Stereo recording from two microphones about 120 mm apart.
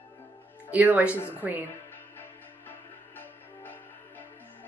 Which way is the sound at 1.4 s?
15° right (ahead or behind).